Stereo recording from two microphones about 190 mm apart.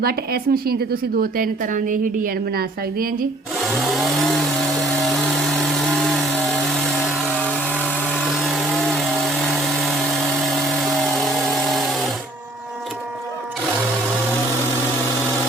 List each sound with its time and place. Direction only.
0.0 s a woman's voice: 50° right (ahead or behind)
3.6 s chainsaw: centre (ahead or behind)
8.2 s a sound: 5° right (ahead or behind)